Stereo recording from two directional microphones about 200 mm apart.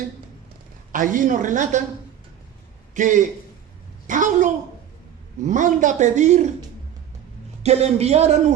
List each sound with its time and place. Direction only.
0.9 s a man's voice: 40° right (ahead or behind)
2.9 s a man's voice: 40° right (ahead or behind)
7.6 s a man's voice: 30° right (ahead or behind)